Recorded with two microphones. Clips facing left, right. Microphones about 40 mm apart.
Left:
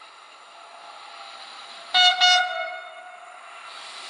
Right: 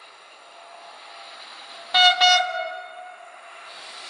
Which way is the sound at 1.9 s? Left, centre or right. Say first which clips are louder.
Right 1 dB; centre.